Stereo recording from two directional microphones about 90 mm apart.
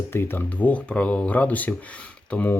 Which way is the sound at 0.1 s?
25° left (ahead or behind).